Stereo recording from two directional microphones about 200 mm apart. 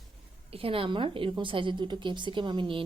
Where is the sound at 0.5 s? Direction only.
30° right (ahead or behind).